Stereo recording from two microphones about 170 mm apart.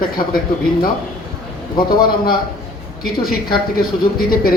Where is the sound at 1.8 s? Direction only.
60° left (ahead or behind).